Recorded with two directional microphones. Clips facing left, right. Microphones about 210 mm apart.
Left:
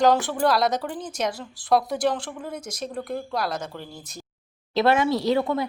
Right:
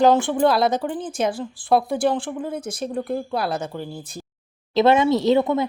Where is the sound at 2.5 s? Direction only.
55° right (ahead or behind).